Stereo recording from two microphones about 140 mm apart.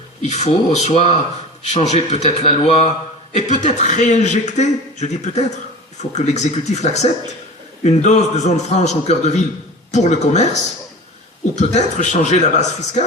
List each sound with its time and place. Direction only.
0.2 s a man's voice: 55° left (ahead or behind)